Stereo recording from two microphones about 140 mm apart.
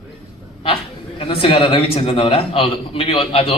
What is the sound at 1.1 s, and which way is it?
A man's voice, 40° left (ahead or behind).